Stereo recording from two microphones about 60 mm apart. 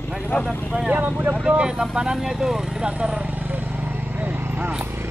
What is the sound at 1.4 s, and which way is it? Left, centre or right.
Speech, centre.